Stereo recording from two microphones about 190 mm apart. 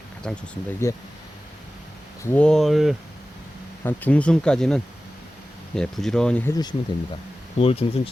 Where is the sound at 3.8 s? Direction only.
10° left (ahead or behind).